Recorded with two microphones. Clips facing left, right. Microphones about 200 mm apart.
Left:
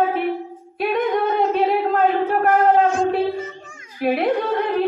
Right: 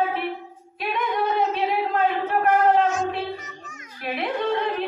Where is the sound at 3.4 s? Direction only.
30° left (ahead or behind).